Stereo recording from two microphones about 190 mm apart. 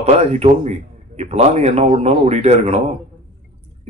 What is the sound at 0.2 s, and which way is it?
Speech, 35° right (ahead or behind).